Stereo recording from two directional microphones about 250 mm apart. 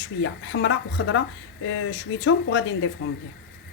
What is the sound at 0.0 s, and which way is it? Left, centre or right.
Speech, left.